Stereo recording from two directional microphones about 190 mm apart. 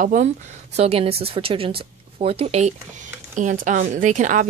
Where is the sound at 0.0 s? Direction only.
45° right (ahead or behind).